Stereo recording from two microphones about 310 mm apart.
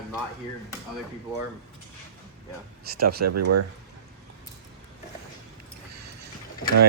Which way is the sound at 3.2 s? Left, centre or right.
Right.